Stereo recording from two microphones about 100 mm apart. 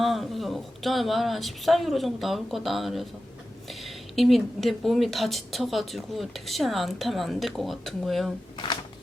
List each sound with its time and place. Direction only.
0.0 s speech: centre (ahead or behind)
8.5 s speech: 50° left (ahead or behind)